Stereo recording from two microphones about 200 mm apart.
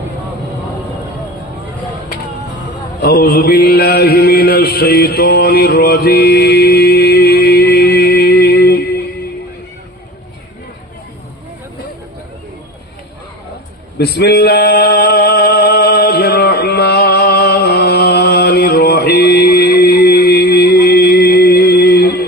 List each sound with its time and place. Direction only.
3.0 s mantra: 50° left (ahead or behind)
14.0 s male singing: 55° left (ahead or behind)